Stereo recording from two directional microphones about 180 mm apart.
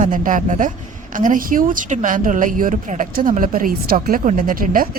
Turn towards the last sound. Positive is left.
turn(degrees=-50)  # may be behind; listen again after turning